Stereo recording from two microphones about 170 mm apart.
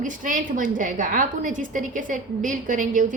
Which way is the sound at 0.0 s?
50° right (ahead or behind).